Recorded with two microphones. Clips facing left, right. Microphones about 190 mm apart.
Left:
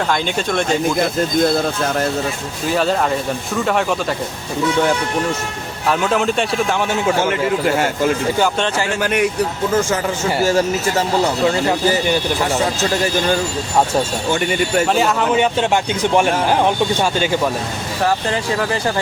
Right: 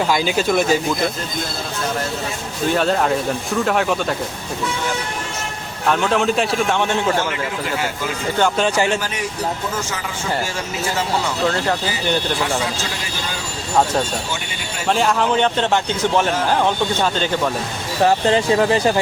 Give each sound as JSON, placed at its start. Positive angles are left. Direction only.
{"t": 0.1, "sound": "a man's voice", "side_deg": -5}
{"t": 2.6, "sound": "a man's voice", "side_deg": 0}
{"t": 5.9, "sound": "a man's voice", "side_deg": 5}
{"t": 9.0, "sound": "speech", "side_deg": 60}
{"t": 10.4, "sound": "speech", "side_deg": 40}
{"t": 14.8, "sound": "a man's voice", "side_deg": 0}
{"t": 18.0, "sound": "speech", "side_deg": -25}